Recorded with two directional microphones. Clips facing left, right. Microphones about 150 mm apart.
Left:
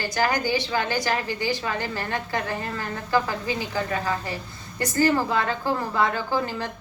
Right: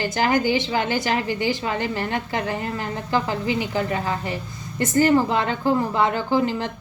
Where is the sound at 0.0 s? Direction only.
20° right (ahead or behind).